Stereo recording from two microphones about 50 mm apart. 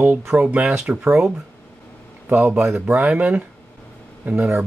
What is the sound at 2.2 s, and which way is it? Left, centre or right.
A man's voice, right.